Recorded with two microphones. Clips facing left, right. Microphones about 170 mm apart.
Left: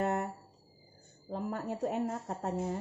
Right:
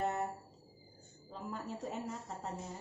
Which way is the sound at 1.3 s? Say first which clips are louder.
Left 7 dB; 60° left (ahead or behind).